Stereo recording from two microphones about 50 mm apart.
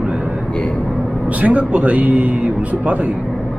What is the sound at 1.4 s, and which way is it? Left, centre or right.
A man's voice, right.